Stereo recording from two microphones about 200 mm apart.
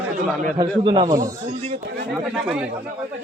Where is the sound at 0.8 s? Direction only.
25° right (ahead or behind).